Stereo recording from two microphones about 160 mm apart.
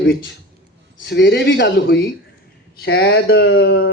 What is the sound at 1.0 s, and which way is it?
Speech, 90° left.